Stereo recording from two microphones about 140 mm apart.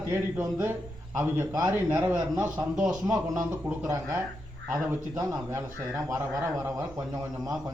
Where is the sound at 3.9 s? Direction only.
15° right (ahead or behind).